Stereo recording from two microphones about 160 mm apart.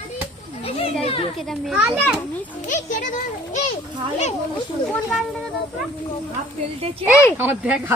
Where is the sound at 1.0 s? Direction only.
40° left (ahead or behind).